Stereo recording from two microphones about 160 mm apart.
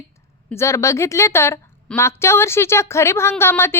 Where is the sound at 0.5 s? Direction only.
20° left (ahead or behind).